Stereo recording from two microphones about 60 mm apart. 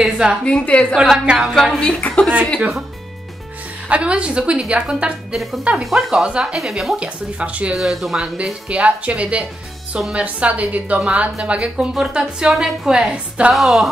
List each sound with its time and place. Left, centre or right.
0.0 s a woman's voice: centre
0.5 s a woman's voice: centre
1.2 s a woman's voice: centre
1.5 s speech: centre
2.0 s a woman's voice: left
3.9 s a woman's voice: centre
5.3 s speech: centre
5.6 s speech: centre
5.9 s a woman's voice: centre
7.0 s speech: centre
7.7 s speech: centre
8.6 s speech: right
11.9 s a woman's voice: centre
13.5 s speech: centre